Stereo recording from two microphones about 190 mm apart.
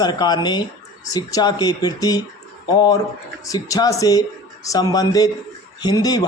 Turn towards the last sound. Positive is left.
turn(degrees=20)  # may be behind; listen again after turning